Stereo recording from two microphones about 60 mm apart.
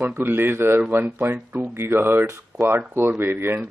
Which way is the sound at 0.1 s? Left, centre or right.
Right.